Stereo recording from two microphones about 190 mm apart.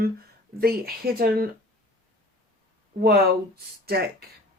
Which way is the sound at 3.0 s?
55° right (ahead or behind).